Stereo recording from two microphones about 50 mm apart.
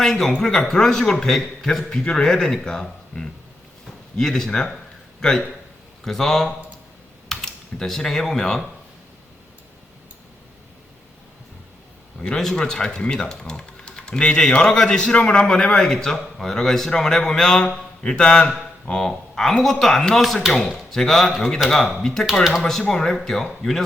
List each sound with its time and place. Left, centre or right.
0.0 s speech: centre
12.2 s speech: centre